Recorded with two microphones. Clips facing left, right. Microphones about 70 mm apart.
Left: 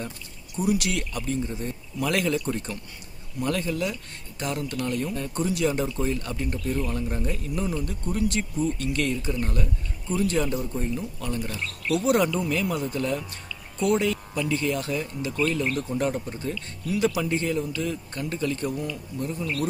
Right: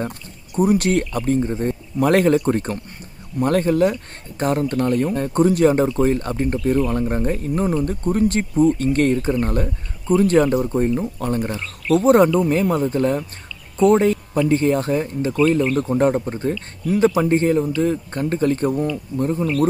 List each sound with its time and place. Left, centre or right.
0.6 s speech: right